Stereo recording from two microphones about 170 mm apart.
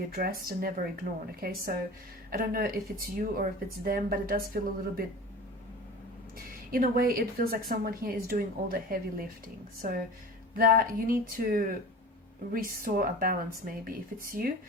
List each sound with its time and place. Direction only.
0.1 s speech: 60° right (ahead or behind)
6.7 s speech: 60° right (ahead or behind)